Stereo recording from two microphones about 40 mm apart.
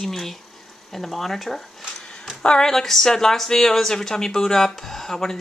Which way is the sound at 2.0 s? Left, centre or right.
Left.